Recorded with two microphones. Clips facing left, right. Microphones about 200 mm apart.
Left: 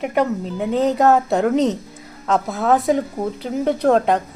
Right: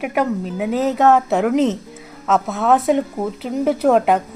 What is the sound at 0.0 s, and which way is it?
A woman's voice, 5° right (ahead or behind).